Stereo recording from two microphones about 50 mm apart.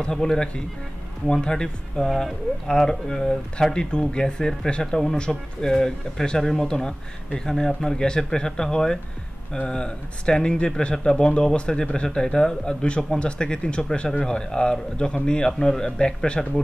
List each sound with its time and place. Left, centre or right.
0.0 s speech: centre